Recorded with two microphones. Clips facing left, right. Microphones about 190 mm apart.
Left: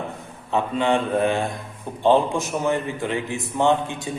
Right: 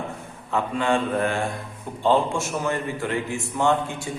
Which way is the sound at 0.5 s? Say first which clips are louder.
Left 2 dB; 20° left (ahead or behind).